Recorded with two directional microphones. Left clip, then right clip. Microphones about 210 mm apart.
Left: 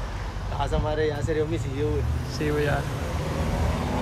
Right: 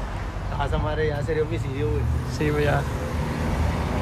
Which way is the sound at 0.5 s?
50° left (ahead or behind).